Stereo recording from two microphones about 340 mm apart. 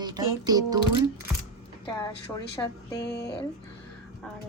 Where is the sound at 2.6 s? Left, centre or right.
Centre.